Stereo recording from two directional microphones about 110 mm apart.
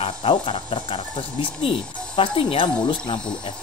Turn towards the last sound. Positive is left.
turn(degrees=50)  # may be behind; listen again after turning